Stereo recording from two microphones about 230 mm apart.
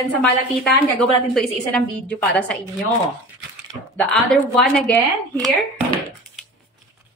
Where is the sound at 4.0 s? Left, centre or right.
Centre.